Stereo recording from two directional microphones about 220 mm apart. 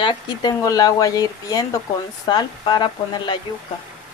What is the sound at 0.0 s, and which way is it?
Speech, 20° left (ahead or behind).